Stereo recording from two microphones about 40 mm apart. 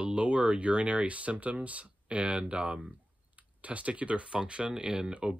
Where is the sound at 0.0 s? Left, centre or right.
Right.